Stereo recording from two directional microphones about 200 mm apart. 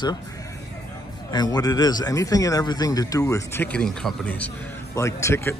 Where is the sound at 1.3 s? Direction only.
20° left (ahead or behind).